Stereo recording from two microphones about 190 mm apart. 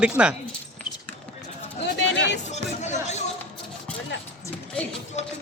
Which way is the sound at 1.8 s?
70° left (ahead or behind).